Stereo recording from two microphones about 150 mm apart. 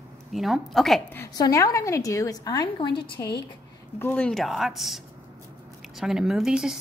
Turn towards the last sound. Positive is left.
turn(degrees=-5)  # may be behind; listen again after turning